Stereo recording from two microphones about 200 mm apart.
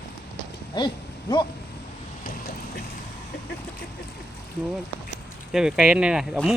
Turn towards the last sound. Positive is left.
turn(degrees=0)  # may be behind; listen again after turning